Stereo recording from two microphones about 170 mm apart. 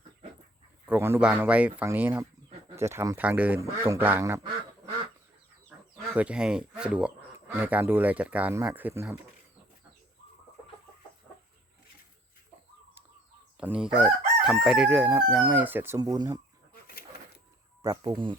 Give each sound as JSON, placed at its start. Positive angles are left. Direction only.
{"t": 0.9, "sound": "speech", "side_deg": -15}
{"t": 6.1, "sound": "speech", "side_deg": -5}
{"t": 13.6, "sound": "speech", "side_deg": -5}
{"t": 18.0, "sound": "speech", "side_deg": -30}